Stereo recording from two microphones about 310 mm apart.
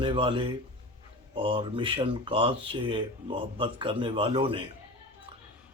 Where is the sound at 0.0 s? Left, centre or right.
Centre.